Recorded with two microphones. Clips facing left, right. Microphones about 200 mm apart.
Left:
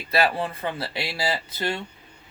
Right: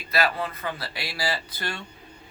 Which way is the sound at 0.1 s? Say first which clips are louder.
Left 3 dB; 30° left (ahead or behind).